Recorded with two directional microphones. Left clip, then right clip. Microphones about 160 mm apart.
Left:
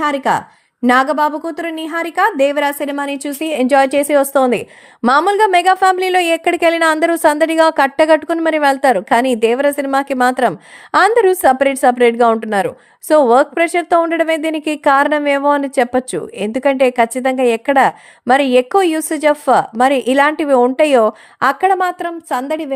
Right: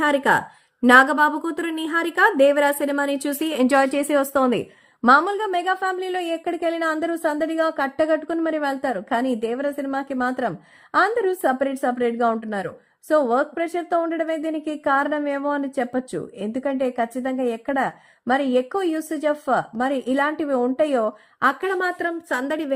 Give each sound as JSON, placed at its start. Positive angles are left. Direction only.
{"t": 0.0, "sound": "a woman's voice", "side_deg": 15}
{"t": 3.4, "sound": "speech", "side_deg": 25}
{"t": 5.0, "sound": "a woman's voice", "side_deg": 45}